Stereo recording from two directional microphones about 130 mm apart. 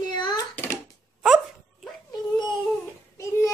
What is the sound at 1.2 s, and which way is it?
Dog, 5° right (ahead or behind).